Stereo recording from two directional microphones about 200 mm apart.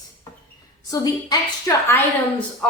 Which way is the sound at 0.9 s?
20° left (ahead or behind).